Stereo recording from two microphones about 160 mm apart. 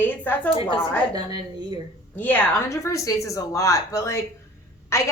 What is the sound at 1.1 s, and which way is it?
Speech, 25° right (ahead or behind).